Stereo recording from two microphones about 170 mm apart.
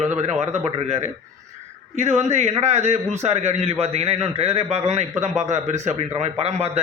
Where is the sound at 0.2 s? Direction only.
40° right (ahead or behind).